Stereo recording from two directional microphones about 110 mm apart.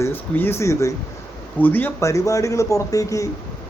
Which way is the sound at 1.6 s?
15° left (ahead or behind).